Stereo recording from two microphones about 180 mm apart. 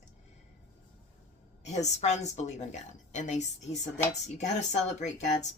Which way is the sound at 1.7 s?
40° left (ahead or behind).